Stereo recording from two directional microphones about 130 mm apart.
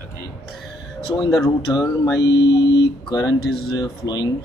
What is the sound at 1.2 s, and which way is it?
Speech, 30° left (ahead or behind).